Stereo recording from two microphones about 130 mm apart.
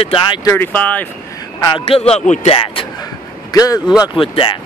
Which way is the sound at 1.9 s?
50° left (ahead or behind).